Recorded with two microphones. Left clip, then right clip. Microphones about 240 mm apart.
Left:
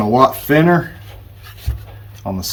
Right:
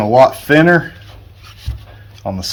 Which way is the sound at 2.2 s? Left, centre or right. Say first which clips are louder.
Right 2 dB; centre.